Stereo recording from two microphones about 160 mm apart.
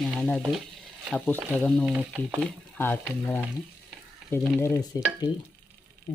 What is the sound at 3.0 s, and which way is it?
Frying, 5° left (ahead or behind).